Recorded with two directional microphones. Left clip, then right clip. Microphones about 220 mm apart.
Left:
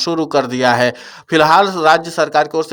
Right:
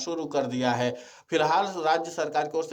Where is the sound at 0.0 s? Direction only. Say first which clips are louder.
Left 13 dB; 35° left (ahead or behind).